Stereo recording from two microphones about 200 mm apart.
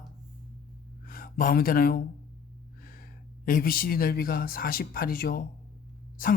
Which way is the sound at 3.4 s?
45° left (ahead or behind).